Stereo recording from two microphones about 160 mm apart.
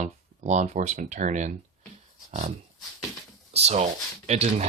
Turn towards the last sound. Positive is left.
turn(degrees=-45)  # may be behind; listen again after turning